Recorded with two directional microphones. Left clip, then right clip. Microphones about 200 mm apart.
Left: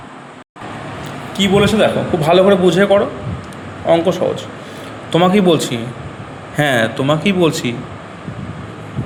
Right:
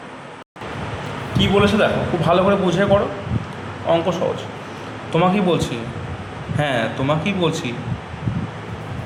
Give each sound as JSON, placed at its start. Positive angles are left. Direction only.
{"t": 1.3, "sound": "a man's voice", "side_deg": 35}